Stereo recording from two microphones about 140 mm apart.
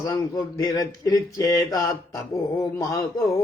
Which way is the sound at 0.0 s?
25° left (ahead or behind).